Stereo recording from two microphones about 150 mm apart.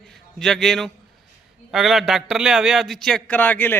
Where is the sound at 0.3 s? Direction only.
Centre (ahead or behind).